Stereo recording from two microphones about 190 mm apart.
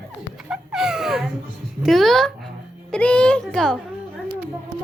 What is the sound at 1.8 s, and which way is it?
Speech, centre (ahead or behind).